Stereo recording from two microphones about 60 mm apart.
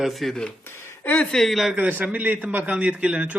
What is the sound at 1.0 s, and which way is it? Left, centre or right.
Speech, left.